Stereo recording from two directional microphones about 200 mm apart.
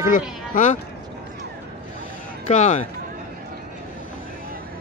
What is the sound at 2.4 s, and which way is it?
Speech, 35° left (ahead or behind).